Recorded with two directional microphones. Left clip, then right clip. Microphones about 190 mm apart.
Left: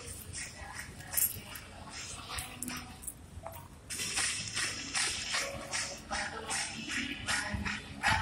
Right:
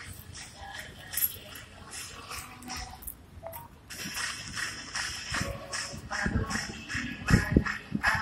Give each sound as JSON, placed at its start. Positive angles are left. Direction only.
{"t": 0.4, "sound": "music", "side_deg": -35}
{"t": 3.9, "sound": "music", "side_deg": 0}